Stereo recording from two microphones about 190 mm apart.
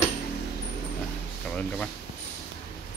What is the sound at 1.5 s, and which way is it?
Speech, 5° left (ahead or behind).